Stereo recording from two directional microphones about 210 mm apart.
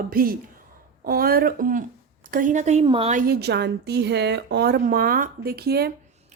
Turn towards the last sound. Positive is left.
turn(degrees=-50)  # may be behind; listen again after turning